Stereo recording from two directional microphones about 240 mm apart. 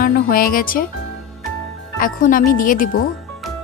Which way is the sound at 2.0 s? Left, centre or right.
Left.